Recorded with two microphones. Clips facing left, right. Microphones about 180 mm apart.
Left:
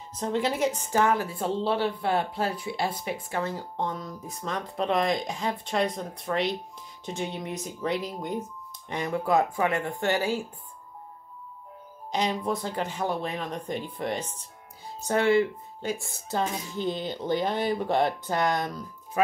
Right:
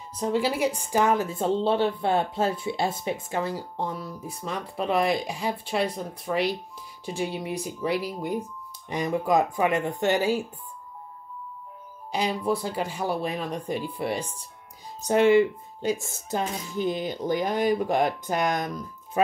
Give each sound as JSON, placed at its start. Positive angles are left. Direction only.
{"t": 0.2, "sound": "speech", "side_deg": -10}
{"t": 12.1, "sound": "speech", "side_deg": -10}